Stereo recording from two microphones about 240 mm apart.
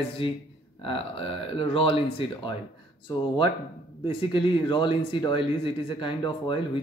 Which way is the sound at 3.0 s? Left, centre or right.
Left.